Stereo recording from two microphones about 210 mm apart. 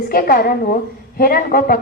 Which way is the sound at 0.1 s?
45° left (ahead or behind).